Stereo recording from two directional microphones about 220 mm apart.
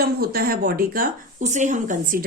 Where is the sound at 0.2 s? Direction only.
45° right (ahead or behind).